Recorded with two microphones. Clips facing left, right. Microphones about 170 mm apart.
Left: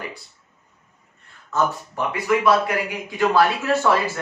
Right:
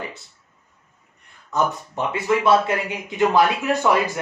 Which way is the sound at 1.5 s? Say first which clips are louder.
Even; 25° right (ahead or behind).